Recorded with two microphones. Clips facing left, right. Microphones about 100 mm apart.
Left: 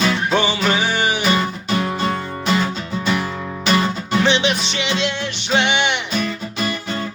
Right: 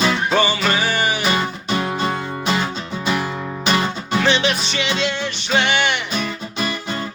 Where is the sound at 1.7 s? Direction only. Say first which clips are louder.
Even; 15° right (ahead or behind).